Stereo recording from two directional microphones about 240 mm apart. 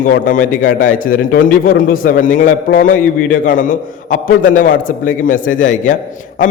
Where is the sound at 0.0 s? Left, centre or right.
Left.